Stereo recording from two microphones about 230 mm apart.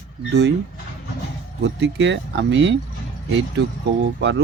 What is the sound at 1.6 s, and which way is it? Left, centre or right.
Speech, right.